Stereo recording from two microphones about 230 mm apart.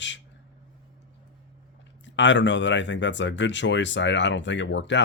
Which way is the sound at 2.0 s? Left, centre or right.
Left.